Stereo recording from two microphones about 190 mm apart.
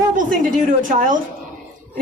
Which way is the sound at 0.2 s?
45° right (ahead or behind).